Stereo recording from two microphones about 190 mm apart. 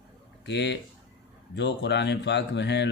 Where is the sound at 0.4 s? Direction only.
65° left (ahead or behind).